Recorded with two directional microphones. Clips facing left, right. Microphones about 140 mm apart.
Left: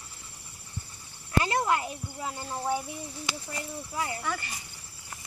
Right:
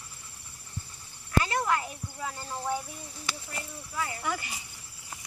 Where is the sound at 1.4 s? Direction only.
25° left (ahead or behind).